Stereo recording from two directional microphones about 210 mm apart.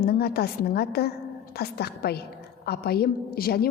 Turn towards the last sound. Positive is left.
turn(degrees=45)  # may be behind; listen again after turning